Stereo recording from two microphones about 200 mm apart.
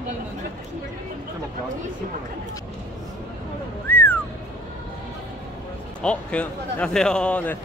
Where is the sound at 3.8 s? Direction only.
10° left (ahead or behind).